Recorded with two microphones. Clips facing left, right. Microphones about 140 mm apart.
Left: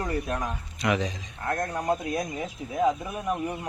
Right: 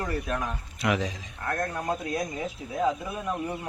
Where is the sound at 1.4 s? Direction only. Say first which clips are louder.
Left 2 dB; 20° left (ahead or behind).